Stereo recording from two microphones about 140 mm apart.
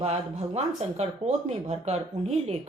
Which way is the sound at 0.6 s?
50° right (ahead or behind).